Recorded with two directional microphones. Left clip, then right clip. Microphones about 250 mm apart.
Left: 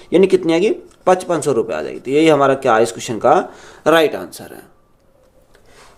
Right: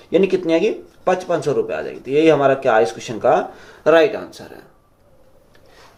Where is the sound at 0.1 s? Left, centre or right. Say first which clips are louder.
Left 3 dB; left.